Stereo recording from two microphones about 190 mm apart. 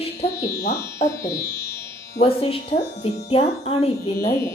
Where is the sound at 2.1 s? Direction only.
30° left (ahead or behind).